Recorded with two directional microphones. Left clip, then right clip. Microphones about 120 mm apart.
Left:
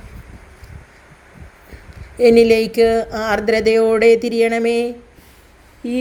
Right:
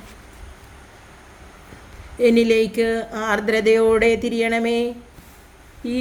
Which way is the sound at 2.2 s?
35° left (ahead or behind).